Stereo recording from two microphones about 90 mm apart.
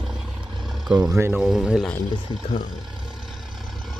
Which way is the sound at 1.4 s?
5° right (ahead or behind).